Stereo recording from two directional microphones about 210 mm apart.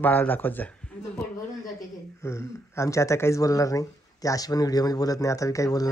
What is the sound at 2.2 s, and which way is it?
Speech, 15° left (ahead or behind).